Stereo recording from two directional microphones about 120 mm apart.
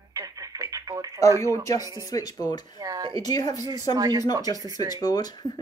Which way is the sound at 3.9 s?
30° right (ahead or behind).